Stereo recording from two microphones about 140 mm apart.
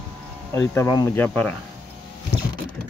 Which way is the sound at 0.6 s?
25° left (ahead or behind).